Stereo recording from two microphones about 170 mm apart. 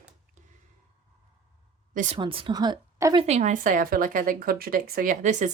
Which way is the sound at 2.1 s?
30° right (ahead or behind).